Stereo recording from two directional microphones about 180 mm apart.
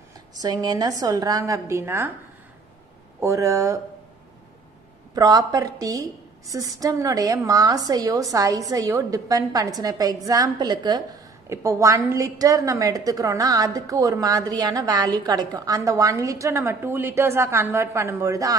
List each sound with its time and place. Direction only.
0.3 s a woman's voice: 20° right (ahead or behind)
3.2 s speech: 15° right (ahead or behind)
5.1 s a woman's voice: 20° right (ahead or behind)